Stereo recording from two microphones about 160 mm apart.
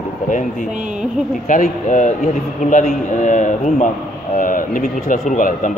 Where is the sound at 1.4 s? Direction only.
55° left (ahead or behind).